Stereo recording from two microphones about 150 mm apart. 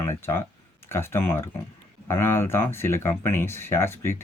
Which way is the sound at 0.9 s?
15° left (ahead or behind).